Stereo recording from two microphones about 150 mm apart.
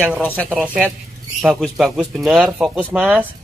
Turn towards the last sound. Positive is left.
turn(degrees=-10)  # may be behind; listen again after turning